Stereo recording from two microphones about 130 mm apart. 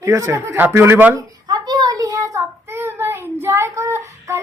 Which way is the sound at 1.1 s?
30° right (ahead or behind).